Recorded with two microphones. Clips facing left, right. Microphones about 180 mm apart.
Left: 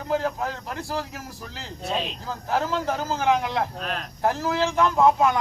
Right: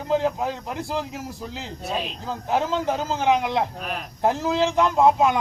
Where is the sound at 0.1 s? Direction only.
15° right (ahead or behind).